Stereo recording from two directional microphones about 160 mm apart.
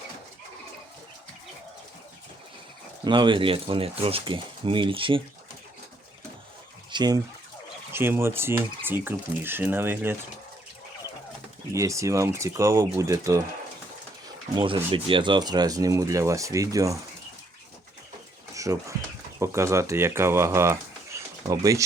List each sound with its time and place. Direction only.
3.0 s speech: 30° right (ahead or behind)
6.9 s speech: 25° right (ahead or behind)
7.9 s speech: 15° right (ahead or behind)
11.7 s speech: 20° right (ahead or behind)
14.5 s speech: 30° right (ahead or behind)
18.5 s bird: 20° right (ahead or behind)
19.4 s speech: 20° right (ahead or behind)